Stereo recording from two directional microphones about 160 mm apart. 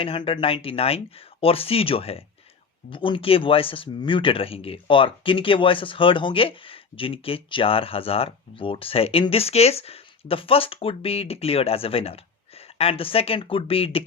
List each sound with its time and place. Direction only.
0.0 s speech: 35° left (ahead or behind)